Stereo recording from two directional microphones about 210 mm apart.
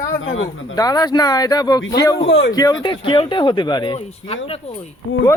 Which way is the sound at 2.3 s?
55° left (ahead or behind).